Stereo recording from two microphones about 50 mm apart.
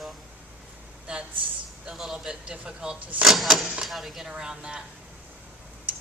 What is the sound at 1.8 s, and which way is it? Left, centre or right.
Speech, centre.